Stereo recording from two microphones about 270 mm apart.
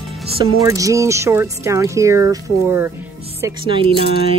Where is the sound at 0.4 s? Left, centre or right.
Centre.